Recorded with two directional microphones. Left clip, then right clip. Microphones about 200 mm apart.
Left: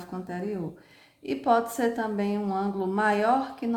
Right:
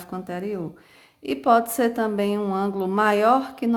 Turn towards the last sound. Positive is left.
turn(degrees=-35)  # may be behind; listen again after turning